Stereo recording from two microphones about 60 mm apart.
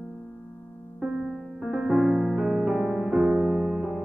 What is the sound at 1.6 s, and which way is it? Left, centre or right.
Music, centre.